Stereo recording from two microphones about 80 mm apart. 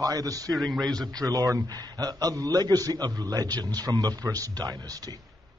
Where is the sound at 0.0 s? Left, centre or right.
Right.